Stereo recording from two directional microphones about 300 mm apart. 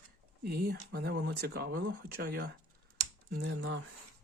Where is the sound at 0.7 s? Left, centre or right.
Right.